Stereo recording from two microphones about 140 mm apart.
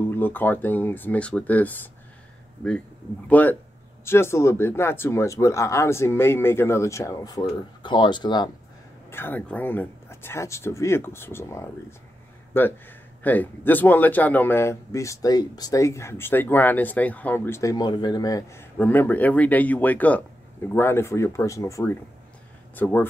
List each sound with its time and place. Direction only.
0.1 s a man's voice: 15° left (ahead or behind)
3.3 s a man's voice: 10° left (ahead or behind); by 8.5 s 30° left (ahead or behind)
9.1 s a man's voice: 15° left (ahead or behind)
17.6 s a man's voice: 25° left (ahead or behind)